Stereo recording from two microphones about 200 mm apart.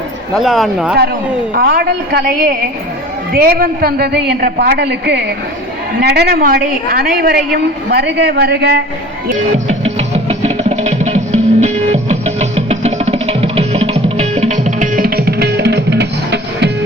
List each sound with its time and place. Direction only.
0.3 s speech: centre (ahead or behind)
1.5 s a woman's voice: 50° right (ahead or behind)
9.5 s music: 35° right (ahead or behind); by 16.7 s 60° right (ahead or behind)